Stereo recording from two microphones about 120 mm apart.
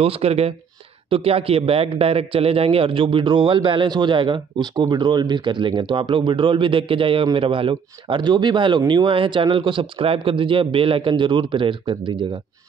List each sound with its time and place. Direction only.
0.0 s a man's voice: 55° right (ahead or behind)